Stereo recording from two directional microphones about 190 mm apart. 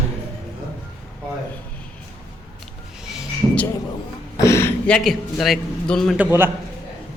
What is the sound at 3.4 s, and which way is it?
Speech, 15° right (ahead or behind).